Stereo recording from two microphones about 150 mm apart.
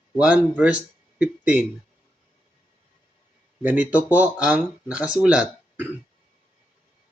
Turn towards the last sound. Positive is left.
turn(degrees=-10)  # may be behind; listen again after turning